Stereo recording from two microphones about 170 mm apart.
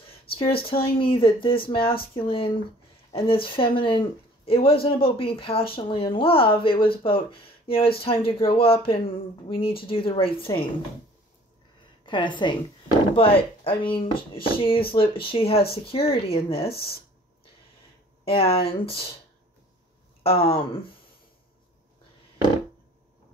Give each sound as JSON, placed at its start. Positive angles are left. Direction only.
{"t": 0.1, "sound": "a sound", "side_deg": 35}
{"t": 0.9, "sound": "speech", "side_deg": 30}
{"t": 12.1, "sound": "a woman's voice", "side_deg": 30}
{"t": 18.2, "sound": "speech", "side_deg": 35}
{"t": 20.2, "sound": "speech", "side_deg": 35}